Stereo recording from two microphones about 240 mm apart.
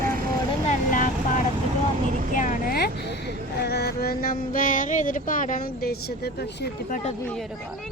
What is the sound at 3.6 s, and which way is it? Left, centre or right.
Music, left.